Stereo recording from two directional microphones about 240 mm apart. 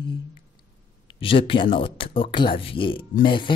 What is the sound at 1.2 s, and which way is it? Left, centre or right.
Music, left.